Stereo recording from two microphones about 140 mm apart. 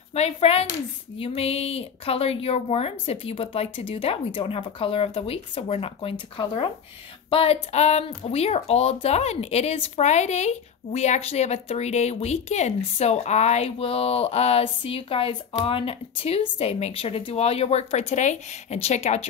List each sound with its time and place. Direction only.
0.1 s speech: 50° left (ahead or behind)